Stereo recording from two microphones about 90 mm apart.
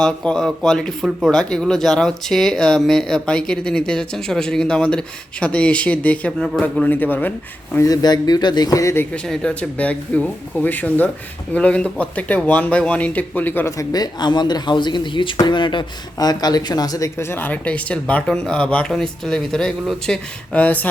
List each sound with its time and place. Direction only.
0.0 s speech: 5° left (ahead or behind)
7.8 s speech: 45° left (ahead or behind)
8.8 s speech: 30° left (ahead or behind)
9.1 s speech: 10° left (ahead or behind)
13.7 s speech: 40° left (ahead or behind); by 15.9 s 60° left (ahead or behind)
16.1 s speech: 50° left (ahead or behind)
17.2 s speech: 25° left (ahead or behind)